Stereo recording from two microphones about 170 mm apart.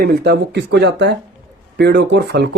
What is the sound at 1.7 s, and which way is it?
Speech, 80° right.